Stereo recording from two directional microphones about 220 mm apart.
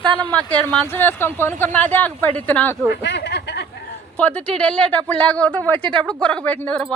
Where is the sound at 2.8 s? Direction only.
10° right (ahead or behind).